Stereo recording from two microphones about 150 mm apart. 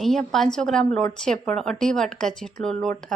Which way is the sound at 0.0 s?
5° left (ahead or behind).